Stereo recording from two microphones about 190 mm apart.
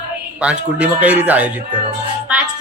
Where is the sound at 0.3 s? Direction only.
5° right (ahead or behind).